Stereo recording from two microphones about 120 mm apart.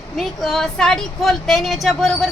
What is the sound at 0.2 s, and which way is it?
Speech, centre (ahead or behind).